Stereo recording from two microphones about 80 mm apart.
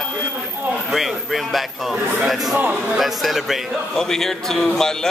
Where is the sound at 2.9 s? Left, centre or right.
Centre.